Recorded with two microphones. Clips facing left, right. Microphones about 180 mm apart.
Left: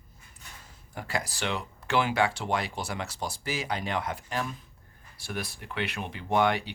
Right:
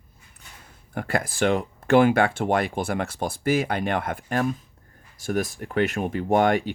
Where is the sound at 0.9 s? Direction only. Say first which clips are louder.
Right 7 dB; 55° right (ahead or behind).